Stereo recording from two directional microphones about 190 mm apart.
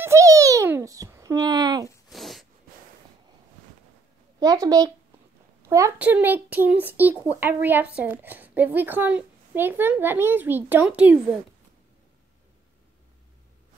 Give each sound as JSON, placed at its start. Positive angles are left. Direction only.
{"t": 0.0, "sound": "babbling", "side_deg": -15}
{"t": 2.0, "sound": "a sound", "side_deg": 0}
{"t": 4.4, "sound": "a child's voice", "side_deg": -20}